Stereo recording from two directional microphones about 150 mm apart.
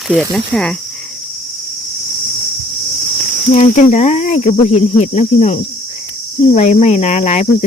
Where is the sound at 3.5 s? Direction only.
55° left (ahead or behind).